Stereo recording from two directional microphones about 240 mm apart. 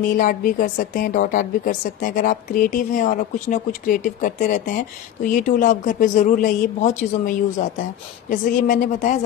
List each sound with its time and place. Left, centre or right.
0.0 s a woman's voice: left